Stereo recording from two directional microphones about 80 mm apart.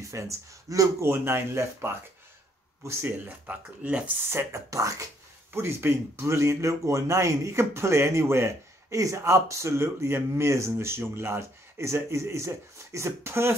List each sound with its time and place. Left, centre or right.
0.0 s speech: right; by 4.0 s centre
4.3 s speech: right
5.5 s speech: right